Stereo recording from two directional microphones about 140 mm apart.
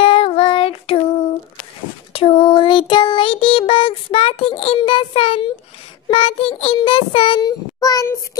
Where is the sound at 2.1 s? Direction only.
40° left (ahead or behind).